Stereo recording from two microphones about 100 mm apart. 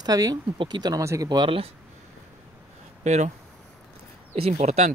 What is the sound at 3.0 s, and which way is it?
Speech, 90° right.